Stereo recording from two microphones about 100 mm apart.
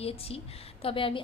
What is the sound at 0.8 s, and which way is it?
Speech, 65° left (ahead or behind).